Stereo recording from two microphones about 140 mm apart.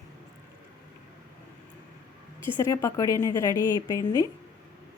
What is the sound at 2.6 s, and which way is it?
A woman's voice, 20° left (ahead or behind).